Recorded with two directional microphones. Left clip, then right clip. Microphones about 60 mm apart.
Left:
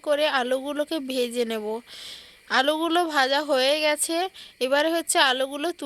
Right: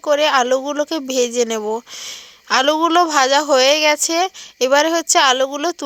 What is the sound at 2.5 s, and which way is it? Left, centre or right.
A woman's voice, right.